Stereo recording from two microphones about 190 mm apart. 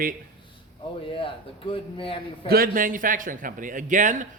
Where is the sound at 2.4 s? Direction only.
50° right (ahead or behind).